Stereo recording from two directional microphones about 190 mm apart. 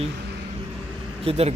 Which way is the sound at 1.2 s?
35° right (ahead or behind).